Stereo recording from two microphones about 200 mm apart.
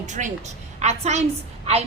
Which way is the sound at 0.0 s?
35° right (ahead or behind).